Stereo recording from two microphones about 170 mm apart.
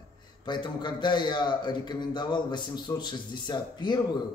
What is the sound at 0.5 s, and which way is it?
A man's voice, 25° left (ahead or behind).